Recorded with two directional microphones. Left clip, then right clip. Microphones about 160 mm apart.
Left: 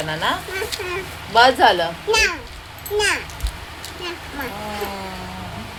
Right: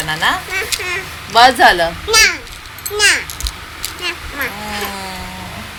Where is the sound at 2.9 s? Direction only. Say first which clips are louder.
Right 7 dB; 25° left (ahead or behind).